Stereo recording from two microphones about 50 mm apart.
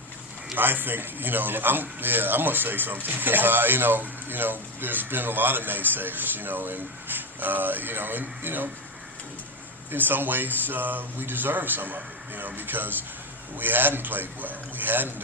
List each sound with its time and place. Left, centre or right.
0.5 s a man's voice: right
9.9 s a man's voice: right